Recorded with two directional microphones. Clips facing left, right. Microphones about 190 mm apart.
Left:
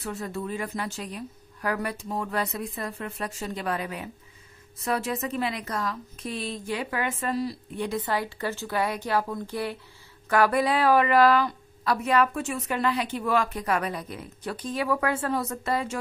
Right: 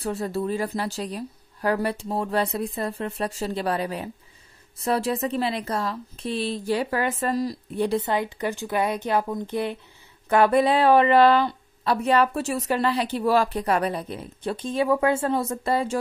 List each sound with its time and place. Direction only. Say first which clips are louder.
0.0 s a woman's voice: right 6 dB; 35° right (ahead or behind)
8.0 s speech: right 3 dB; 20° right (ahead or behind)